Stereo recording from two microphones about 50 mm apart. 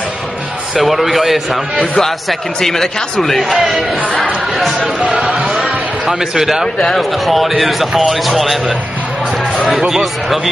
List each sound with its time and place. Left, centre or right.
0.7 s a man's voice: centre
4.6 s a man's voice: centre
5.0 s speech: centre
5.5 s a sound: centre
7.0 s a man's voice: centre